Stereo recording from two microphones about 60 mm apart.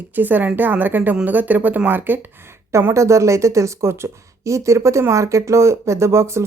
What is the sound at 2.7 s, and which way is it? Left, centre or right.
A woman's voice, right.